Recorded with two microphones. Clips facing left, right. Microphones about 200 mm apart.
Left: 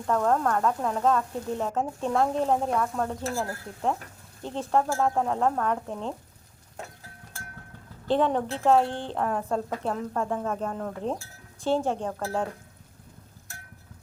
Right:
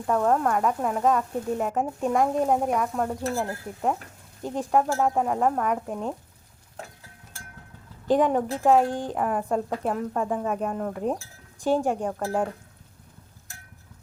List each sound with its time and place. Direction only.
0.1 s speech: 10° right (ahead or behind)
8.0 s speech: 10° right (ahead or behind)